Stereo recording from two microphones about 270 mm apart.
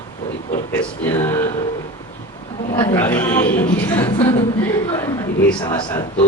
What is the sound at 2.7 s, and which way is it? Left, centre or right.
A woman's voice, centre.